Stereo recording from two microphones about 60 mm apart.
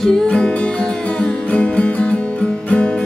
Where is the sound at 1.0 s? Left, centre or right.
Centre.